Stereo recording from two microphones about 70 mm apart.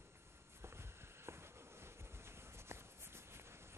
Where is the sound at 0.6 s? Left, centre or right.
Right.